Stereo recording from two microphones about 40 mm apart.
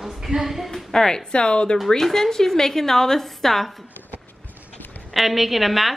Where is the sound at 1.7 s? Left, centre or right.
Centre.